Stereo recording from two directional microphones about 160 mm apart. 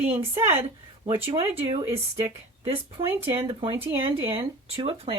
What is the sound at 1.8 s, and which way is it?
Speech, 15° right (ahead or behind).